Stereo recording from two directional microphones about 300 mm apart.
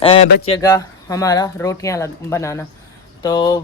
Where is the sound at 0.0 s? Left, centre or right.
Centre.